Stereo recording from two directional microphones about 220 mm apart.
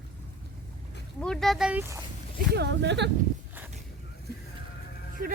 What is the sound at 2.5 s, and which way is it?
Speech, 50° right (ahead or behind).